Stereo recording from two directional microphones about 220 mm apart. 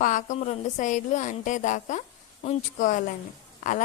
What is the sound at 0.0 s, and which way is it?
A woman's voice, 35° left (ahead or behind).